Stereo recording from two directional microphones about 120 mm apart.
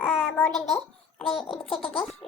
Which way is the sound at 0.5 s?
Centre (ahead or behind).